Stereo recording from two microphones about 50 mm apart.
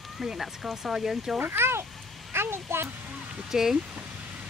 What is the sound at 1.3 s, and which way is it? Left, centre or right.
A child's voice, right.